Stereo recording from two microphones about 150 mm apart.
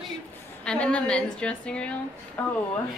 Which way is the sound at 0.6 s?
5° left (ahead or behind).